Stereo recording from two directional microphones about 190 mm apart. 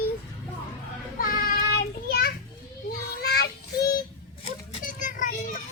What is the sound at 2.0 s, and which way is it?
Children playing, 55° left (ahead or behind).